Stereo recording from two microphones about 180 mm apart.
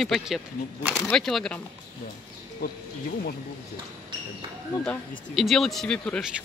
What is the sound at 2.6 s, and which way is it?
Speech, 60° left (ahead or behind).